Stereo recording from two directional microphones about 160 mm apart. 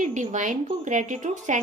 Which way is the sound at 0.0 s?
50° right (ahead or behind).